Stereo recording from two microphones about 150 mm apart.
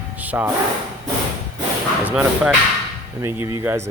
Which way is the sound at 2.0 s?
10° right (ahead or behind).